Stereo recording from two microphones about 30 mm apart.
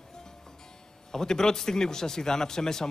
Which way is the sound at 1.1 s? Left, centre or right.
Centre.